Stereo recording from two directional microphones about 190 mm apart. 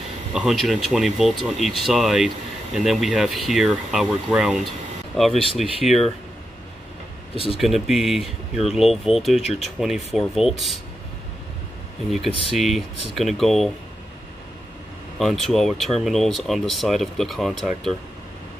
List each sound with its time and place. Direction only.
0.3 s speech: centre (ahead or behind)
5.8 s speech: 40° left (ahead or behind)
7.5 s speech: centre (ahead or behind)
12.1 s speech: centre (ahead or behind)
15.1 s speech: centre (ahead or behind)